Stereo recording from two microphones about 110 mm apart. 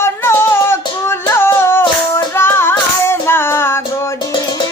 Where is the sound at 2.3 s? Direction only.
20° left (ahead or behind).